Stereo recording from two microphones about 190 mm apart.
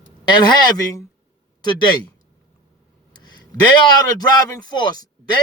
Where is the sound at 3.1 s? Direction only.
20° left (ahead or behind).